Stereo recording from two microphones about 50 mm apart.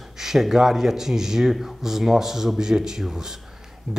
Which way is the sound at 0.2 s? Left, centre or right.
Centre.